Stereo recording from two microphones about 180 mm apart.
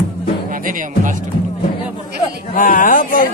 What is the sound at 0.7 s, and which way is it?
Speech, 45° right (ahead or behind).